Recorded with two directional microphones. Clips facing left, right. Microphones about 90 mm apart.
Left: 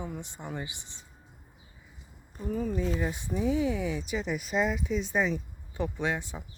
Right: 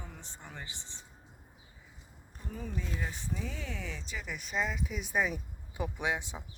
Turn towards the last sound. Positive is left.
turn(degrees=-15)  # may be behind; listen again after turning